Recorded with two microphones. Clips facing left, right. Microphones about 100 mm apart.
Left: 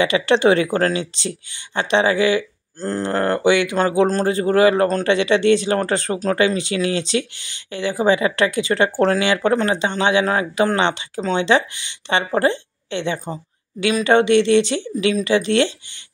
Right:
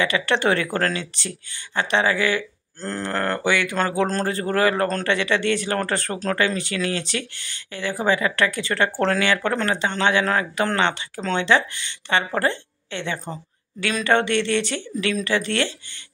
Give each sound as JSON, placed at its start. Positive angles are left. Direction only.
{"t": 0.0, "sound": "speech", "side_deg": 20}